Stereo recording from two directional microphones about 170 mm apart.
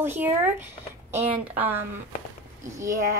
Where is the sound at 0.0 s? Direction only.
10° right (ahead or behind).